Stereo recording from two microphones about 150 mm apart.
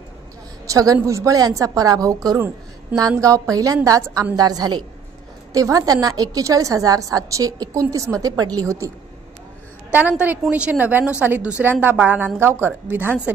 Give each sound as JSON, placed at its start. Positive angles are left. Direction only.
{"t": 0.7, "sound": "a woman's voice", "side_deg": -25}
{"t": 9.9, "sound": "a woman's voice", "side_deg": -10}